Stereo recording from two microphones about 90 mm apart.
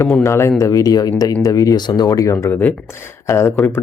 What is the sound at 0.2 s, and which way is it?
Speech, 35° left (ahead or behind).